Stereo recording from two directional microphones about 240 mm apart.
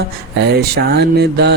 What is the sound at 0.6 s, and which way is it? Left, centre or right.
Mantra, right.